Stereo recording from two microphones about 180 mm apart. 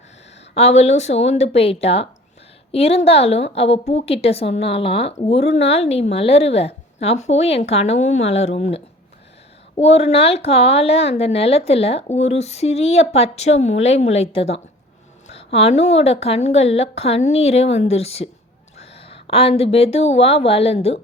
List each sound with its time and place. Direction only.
0.5 s speech: 35° left (ahead or behind)
9.8 s a woman's voice: 35° left (ahead or behind)